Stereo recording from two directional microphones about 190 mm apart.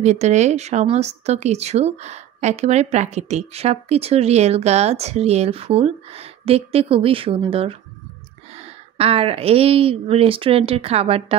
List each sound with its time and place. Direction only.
0.0 s speech: 35° right (ahead or behind)